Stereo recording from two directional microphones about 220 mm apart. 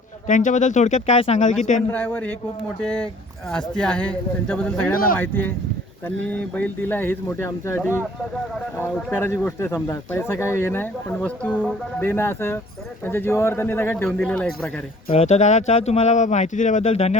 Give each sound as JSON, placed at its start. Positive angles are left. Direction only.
{"t": 0.3, "sound": "speech", "side_deg": 35}
{"t": 1.9, "sound": "speech", "side_deg": 5}
{"t": 6.6, "sound": "speech", "side_deg": 10}
{"t": 15.1, "sound": "speech", "side_deg": 30}